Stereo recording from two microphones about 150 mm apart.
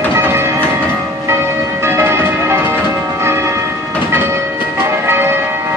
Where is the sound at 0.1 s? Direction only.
15° right (ahead or behind).